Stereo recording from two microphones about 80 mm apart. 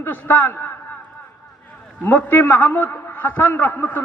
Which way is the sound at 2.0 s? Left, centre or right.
Left.